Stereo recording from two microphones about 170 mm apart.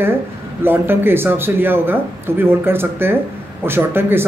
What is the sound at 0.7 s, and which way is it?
A man's voice, 15° right (ahead or behind).